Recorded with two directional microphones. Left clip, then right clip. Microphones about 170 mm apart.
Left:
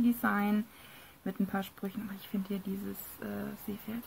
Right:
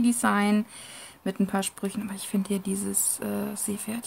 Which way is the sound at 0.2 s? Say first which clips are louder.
Right 7 dB; 15° right (ahead or behind).